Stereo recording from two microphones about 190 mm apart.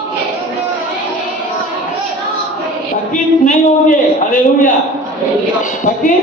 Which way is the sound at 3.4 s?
45° left (ahead or behind).